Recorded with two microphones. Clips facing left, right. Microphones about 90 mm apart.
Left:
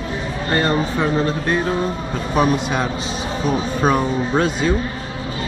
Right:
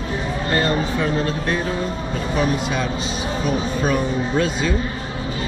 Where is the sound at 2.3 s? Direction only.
50° left (ahead or behind).